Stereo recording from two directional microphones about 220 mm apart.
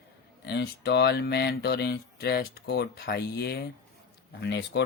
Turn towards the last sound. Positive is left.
turn(degrees=55)  # may be behind; listen again after turning